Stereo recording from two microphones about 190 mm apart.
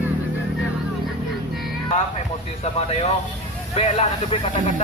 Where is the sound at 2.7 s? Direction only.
35° left (ahead or behind).